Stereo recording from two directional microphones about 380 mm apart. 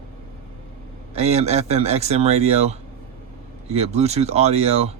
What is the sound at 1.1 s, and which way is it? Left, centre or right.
Speech, centre.